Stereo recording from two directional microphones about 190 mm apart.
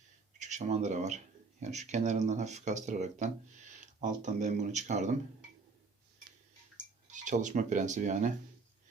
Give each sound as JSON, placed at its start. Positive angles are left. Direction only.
{"t": 0.3, "sound": "speech", "side_deg": -40}
{"t": 7.1, "sound": "speech", "side_deg": -40}